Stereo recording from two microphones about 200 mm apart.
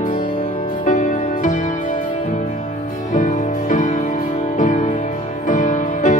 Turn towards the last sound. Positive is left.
turn(degrees=35)  # may be behind; listen again after turning